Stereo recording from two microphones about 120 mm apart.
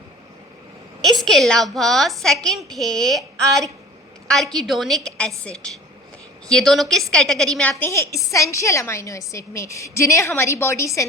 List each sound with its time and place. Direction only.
1.0 s a woman's voice: centre (ahead or behind)
7.8 s a woman's voice: 20° left (ahead or behind)